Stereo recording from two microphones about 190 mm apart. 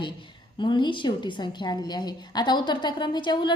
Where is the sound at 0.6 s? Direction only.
25° left (ahead or behind).